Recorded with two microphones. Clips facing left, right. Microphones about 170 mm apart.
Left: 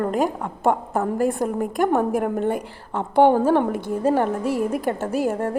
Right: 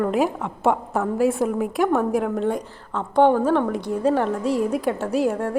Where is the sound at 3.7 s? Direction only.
5° left (ahead or behind).